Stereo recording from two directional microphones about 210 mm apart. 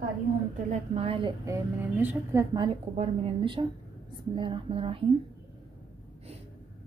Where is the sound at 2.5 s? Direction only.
25° right (ahead or behind).